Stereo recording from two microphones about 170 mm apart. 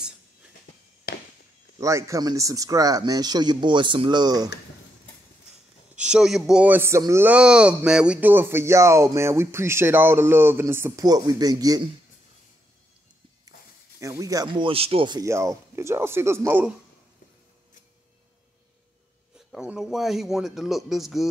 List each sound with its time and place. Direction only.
1.1 s walk: 65° left (ahead or behind)
1.8 s speech: 20° right (ahead or behind)
5.9 s speech: 5° right (ahead or behind); by 11.9 s 20° right (ahead or behind)
13.9 s speech: 20° right (ahead or behind)
19.5 s speech: 5° right (ahead or behind)